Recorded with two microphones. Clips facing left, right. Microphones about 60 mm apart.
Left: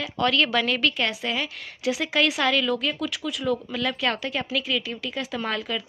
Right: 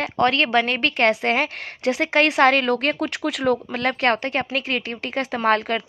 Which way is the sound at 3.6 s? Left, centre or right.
Right.